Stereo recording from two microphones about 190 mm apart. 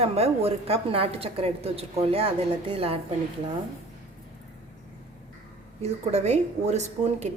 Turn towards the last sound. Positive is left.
turn(degrees=-35)  # may be behind; listen again after turning